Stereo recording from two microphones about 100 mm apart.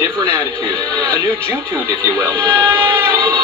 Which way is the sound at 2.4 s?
25° right (ahead or behind).